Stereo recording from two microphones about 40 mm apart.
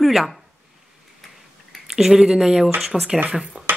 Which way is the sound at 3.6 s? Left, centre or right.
Right.